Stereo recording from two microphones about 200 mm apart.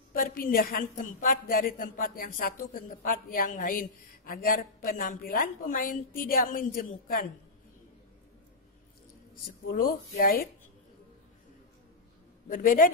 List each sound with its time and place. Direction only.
0.1 s a woman's voice: 45° left (ahead or behind)
9.3 s a woman's voice: 45° left (ahead or behind)
12.4 s a woman's voice: 45° left (ahead or behind)